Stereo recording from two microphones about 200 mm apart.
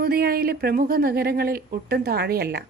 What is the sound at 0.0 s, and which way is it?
A woman's voice, 50° right (ahead or behind).